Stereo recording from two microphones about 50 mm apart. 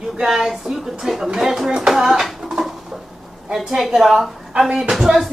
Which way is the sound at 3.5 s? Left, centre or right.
Centre.